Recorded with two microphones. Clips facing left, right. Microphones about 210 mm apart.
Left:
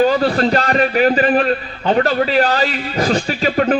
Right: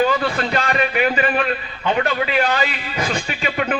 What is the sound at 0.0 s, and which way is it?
A man's voice, 35° left (ahead or behind).